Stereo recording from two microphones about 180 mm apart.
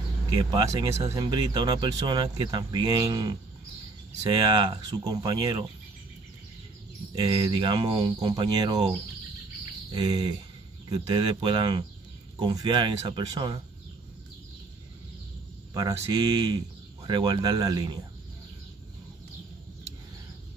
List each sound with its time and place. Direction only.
0.7 s speech: 15° right (ahead or behind)
7.2 s speech: 20° right (ahead or behind)
9.9 s speech: 25° right (ahead or behind)
15.7 s speech: 20° right (ahead or behind)